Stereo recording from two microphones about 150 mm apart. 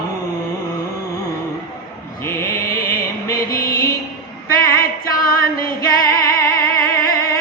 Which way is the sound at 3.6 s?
25° left (ahead or behind).